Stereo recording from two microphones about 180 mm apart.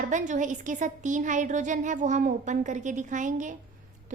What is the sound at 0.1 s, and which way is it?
A woman's voice, 45° right (ahead or behind).